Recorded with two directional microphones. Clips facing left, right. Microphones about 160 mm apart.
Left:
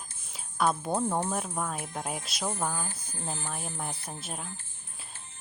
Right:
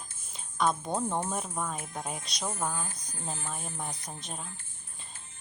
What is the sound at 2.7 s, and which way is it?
Speech, 35° left (ahead or behind).